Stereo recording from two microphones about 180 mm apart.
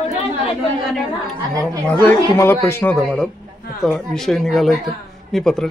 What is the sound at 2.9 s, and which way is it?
Speech, centre (ahead or behind).